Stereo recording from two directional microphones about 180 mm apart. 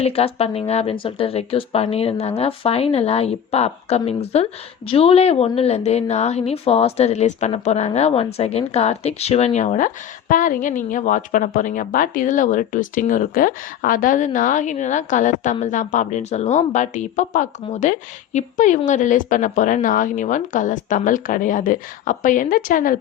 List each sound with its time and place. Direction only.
0.0 s a woman's voice: 35° left (ahead or behind); by 23.0 s 50° left (ahead or behind)